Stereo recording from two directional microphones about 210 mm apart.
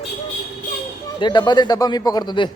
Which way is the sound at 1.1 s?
20° left (ahead or behind).